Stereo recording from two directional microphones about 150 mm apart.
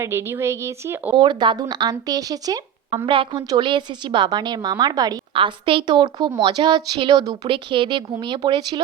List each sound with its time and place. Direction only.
0.0 s speech: 15° right (ahead or behind)
1.1 s speech: 30° right (ahead or behind)